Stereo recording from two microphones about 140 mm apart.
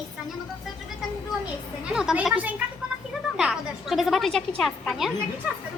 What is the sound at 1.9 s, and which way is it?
A woman's voice, 5° right (ahead or behind).